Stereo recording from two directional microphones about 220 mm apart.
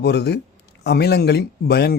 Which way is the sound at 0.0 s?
50° left (ahead or behind).